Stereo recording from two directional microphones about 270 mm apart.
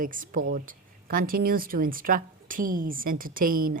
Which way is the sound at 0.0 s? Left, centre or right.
Right.